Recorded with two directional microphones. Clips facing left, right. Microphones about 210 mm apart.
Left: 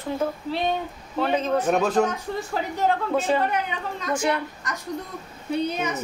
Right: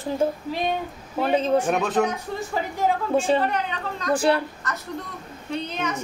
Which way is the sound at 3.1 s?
30° right (ahead or behind).